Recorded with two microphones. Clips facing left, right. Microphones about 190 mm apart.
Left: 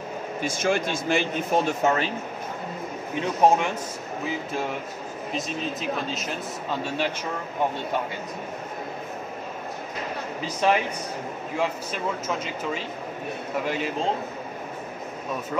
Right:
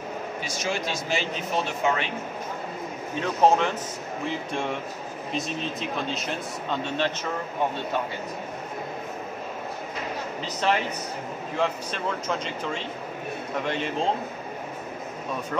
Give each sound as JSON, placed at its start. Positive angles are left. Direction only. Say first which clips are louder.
{"t": 0.4, "sound": "speech", "louder": "left 7 dB", "side_deg": 50}
{"t": 3.2, "sound": "speech", "louder": "even", "side_deg": 15}
{"t": 10.4, "sound": "speech", "louder": "left 3 dB", "side_deg": 10}
{"t": 13.7, "sound": "speech", "louder": "even", "side_deg": 5}